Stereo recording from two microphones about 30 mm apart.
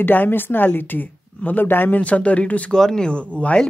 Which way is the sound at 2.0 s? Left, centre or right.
Left.